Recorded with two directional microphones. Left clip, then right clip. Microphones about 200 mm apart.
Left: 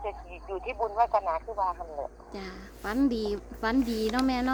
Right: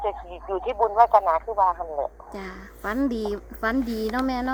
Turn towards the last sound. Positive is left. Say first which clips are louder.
# right 2 dB
turn(degrees=-20)  # may be behind; listen again after turning